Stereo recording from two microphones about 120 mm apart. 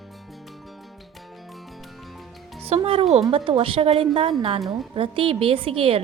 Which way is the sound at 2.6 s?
55° right (ahead or behind).